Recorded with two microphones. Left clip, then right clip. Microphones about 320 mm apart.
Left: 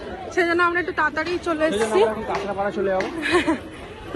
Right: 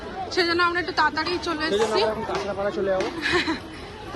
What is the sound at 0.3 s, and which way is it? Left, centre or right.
A woman's voice, centre.